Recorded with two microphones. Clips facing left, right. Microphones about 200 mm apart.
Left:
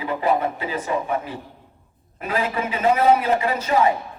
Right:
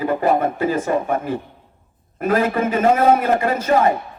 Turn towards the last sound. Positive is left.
turn(degrees=-50)  # may be behind; listen again after turning